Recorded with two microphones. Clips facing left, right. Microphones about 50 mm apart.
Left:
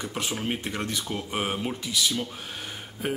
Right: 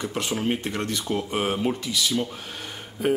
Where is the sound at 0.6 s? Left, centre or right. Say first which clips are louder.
Right 3 dB; centre.